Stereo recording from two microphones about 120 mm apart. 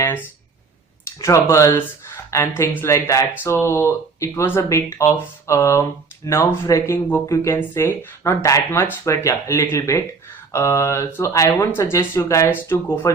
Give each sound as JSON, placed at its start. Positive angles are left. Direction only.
{"t": 0.0, "sound": "speech", "side_deg": 20}